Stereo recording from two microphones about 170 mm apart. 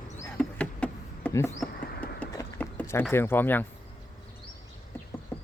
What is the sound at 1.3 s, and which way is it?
Speech, 15° left (ahead or behind).